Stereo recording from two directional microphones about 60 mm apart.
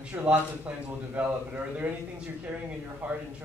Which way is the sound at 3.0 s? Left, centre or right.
Right.